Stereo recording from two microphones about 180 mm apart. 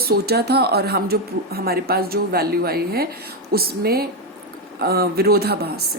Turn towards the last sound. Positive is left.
turn(degrees=-60)  # may be behind; listen again after turning